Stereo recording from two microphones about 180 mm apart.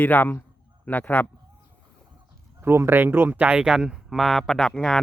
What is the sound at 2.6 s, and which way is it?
Speech, 15° right (ahead or behind).